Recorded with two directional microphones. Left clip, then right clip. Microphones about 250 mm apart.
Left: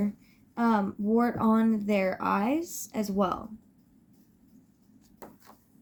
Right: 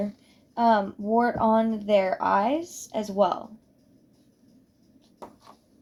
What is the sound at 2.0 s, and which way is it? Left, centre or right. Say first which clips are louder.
A woman's voice: right 6 dB; left.